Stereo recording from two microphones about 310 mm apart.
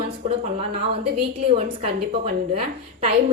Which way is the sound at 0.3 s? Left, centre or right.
Centre.